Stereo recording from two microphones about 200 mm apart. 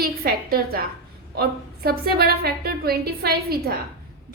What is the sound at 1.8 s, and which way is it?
A woman's voice, 50° right (ahead or behind).